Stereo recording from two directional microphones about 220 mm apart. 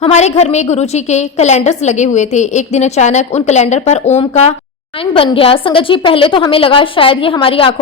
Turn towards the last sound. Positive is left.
turn(degrees=25)  # may be behind; listen again after turning